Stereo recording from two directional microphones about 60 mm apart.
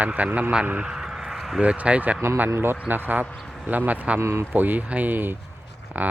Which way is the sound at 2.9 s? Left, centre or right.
Right.